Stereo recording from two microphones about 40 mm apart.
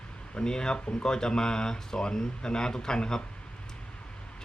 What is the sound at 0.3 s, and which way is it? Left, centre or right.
Speech, centre.